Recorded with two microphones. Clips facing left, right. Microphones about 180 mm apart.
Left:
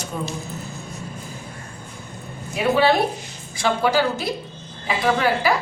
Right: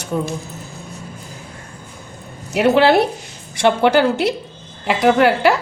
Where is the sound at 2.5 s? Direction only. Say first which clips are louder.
Right 5 dB; 80° right.